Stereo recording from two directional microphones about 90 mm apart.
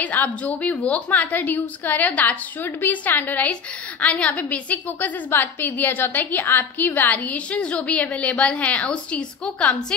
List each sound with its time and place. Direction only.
0.0 s a woman's voice: 15° left (ahead or behind)